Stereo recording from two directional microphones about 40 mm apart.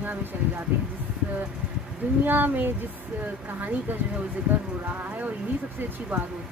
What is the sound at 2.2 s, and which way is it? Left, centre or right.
Speech, right.